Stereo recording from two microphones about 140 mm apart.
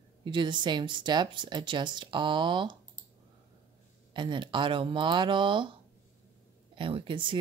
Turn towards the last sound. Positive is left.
turn(degrees=-35)  # may be behind; listen again after turning